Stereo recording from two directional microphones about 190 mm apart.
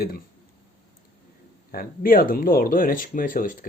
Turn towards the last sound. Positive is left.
turn(degrees=45)  # may be behind; listen again after turning